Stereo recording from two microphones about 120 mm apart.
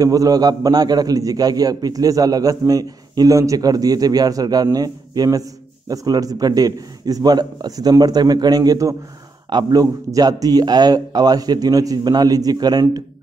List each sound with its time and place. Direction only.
0.0 s a man's voice: 30° right (ahead or behind)